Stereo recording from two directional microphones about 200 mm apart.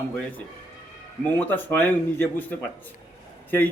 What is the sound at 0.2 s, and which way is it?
Speech, 10° left (ahead or behind).